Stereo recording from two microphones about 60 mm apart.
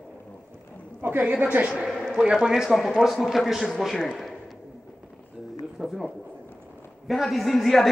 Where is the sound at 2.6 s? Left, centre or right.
Centre.